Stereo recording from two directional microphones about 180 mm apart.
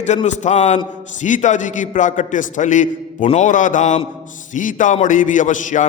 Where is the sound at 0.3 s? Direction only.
40° left (ahead or behind).